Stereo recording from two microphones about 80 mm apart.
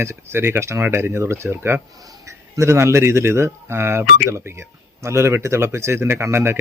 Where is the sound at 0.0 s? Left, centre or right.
Right.